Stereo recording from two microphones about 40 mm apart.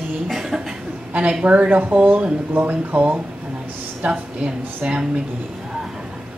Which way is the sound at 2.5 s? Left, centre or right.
Right.